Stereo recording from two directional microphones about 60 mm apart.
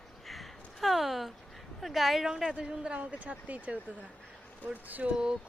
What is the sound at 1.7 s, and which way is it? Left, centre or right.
A woman's voice, centre.